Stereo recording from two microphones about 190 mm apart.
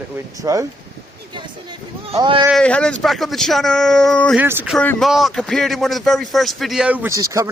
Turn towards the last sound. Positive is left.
turn(degrees=-15)  # may be behind; listen again after turning